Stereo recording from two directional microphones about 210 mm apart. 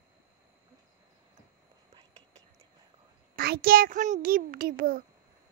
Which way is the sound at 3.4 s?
45° right (ahead or behind).